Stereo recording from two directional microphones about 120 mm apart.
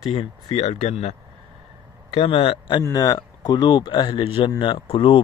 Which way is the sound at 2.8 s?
30° left (ahead or behind).